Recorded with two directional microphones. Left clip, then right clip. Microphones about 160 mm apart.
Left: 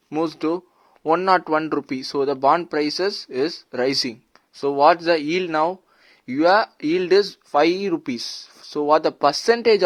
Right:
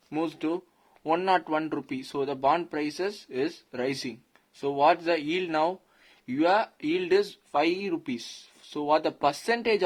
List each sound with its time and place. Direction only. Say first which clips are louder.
0.1 s speech: left 7 dB; 30° left (ahead or behind)